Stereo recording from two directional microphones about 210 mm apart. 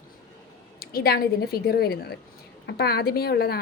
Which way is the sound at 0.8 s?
45° left (ahead or behind).